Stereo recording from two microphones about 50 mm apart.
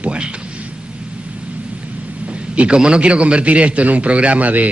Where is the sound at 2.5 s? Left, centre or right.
Right.